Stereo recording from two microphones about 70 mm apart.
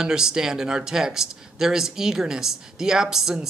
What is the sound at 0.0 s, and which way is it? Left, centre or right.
Speech, centre.